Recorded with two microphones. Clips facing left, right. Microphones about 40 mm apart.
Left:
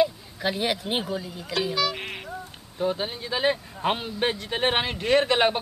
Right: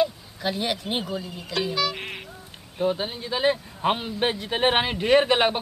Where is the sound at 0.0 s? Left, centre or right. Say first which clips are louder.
Left 1 dB; centre.